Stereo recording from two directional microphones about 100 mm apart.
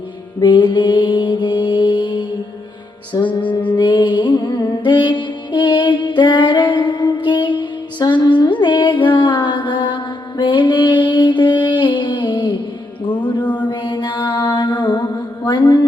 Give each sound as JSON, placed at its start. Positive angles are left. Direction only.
{"t": 0.3, "sound": "mantra", "side_deg": 50}
{"t": 3.6, "sound": "music", "side_deg": 50}
{"t": 13.4, "sound": "mantra", "side_deg": 15}
{"t": 13.7, "sound": "mantra", "side_deg": 50}